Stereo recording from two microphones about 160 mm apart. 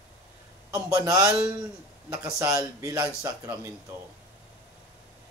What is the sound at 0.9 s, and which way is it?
Speech, 20° right (ahead or behind).